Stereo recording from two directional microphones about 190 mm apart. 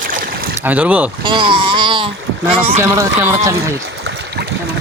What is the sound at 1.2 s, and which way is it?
Speech, 25° right (ahead or behind).